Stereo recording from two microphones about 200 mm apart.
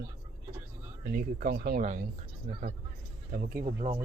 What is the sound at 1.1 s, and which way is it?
Speech, 45° right (ahead or behind).